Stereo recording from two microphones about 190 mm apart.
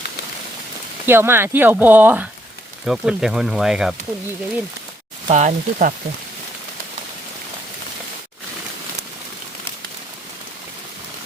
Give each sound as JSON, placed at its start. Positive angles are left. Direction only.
{"t": 1.0, "sound": "speech", "side_deg": -10}
{"t": 5.3, "sound": "speech", "side_deg": -40}